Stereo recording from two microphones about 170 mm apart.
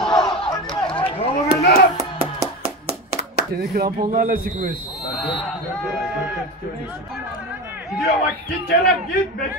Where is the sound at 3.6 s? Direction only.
65° right (ahead or behind).